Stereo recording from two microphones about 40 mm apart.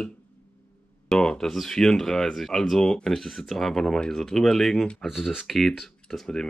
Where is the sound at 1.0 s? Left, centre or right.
Centre.